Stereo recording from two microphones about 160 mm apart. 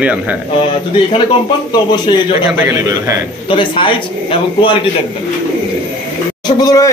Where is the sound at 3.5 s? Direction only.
30° left (ahead or behind).